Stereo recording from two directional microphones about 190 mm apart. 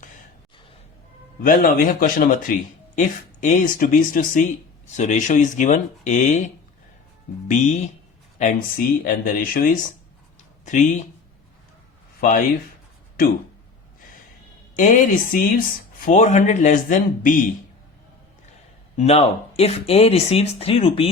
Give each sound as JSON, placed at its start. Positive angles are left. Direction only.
{"t": 1.4, "sound": "speech", "side_deg": 50}
{"t": 14.8, "sound": "speech", "side_deg": 45}
{"t": 18.9, "sound": "speech", "side_deg": 35}